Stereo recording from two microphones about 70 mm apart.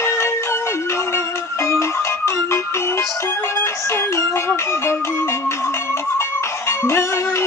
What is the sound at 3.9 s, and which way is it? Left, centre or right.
Music, left.